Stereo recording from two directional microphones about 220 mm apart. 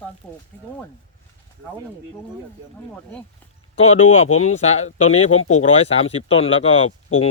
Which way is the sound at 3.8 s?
30° left (ahead or behind).